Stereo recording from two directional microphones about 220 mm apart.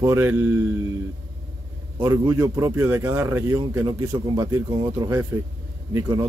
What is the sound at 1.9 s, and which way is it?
Speech, 15° right (ahead or behind).